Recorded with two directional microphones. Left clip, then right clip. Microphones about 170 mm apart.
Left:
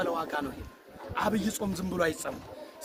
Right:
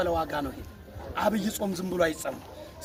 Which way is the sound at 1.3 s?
20° left (ahead or behind).